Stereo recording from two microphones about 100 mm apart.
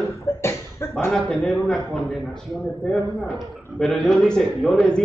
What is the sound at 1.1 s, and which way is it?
Speech, 10° left (ahead or behind).